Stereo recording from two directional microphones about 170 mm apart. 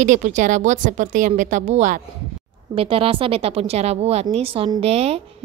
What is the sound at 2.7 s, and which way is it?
A woman's voice, 35° right (ahead or behind).